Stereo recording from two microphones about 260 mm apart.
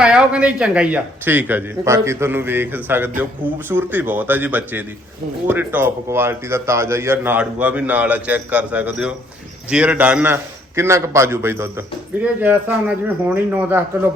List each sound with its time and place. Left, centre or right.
0.0 s a man's voice: centre